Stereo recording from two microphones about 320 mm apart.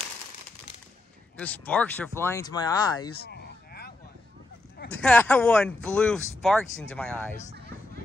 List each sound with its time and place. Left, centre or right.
1.4 s speech: centre
3.2 s sheep: left
4.9 s speech: centre